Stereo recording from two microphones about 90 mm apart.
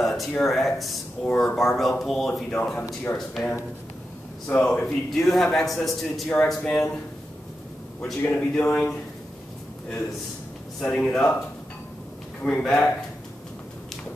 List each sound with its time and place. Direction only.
0.0 s a sound: centre (ahead or behind)
0.4 s a man's voice: centre (ahead or behind)
2.8 s speech: 20° left (ahead or behind)
4.5 s a man's voice: 15° left (ahead or behind)
6.2 s speech: 15° left (ahead or behind)
6.5 s a man's voice: 5° left (ahead or behind)
8.3 s speech: 15° left (ahead or behind)
10.8 s speech: 10° left (ahead or behind)
12.4 s speech: 10° left (ahead or behind)